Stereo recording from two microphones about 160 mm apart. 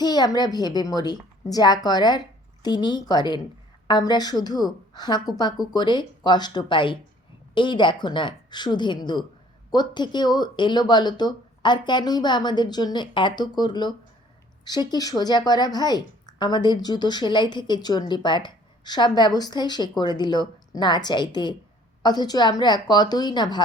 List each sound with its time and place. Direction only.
0.0 s speech: 25° left (ahead or behind)